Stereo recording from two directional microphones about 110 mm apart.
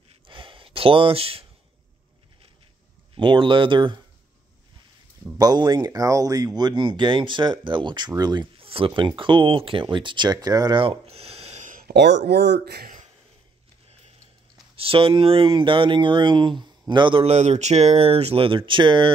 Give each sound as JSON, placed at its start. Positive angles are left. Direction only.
{"t": 0.3, "sound": "a sound", "side_deg": -50}
{"t": 3.2, "sound": "speech", "side_deg": -50}
{"t": 5.4, "sound": "speech", "side_deg": -40}
{"t": 5.9, "sound": "speech", "side_deg": -30}
{"t": 8.5, "sound": "speech", "side_deg": -55}
{"t": 10.8, "sound": "a sound", "side_deg": -60}
{"t": 14.8, "sound": "speech", "side_deg": -55}
{"t": 17.3, "sound": "speech", "side_deg": -90}